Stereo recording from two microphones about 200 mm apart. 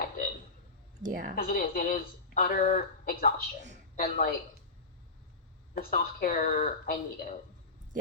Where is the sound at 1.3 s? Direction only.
45° left (ahead or behind).